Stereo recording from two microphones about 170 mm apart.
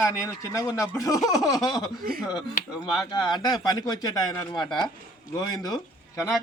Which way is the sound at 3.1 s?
25° left (ahead or behind).